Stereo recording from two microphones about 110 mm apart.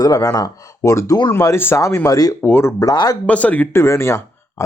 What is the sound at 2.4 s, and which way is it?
Speech, 20° left (ahead or behind).